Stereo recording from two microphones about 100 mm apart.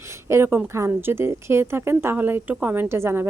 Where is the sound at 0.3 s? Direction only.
25° right (ahead or behind).